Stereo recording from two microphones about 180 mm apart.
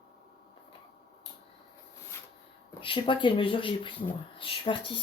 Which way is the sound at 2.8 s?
30° left (ahead or behind).